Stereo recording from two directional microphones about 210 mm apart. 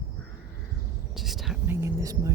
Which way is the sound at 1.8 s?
15° right (ahead or behind).